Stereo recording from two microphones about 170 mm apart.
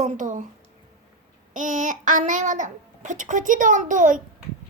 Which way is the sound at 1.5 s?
50° right (ahead or behind).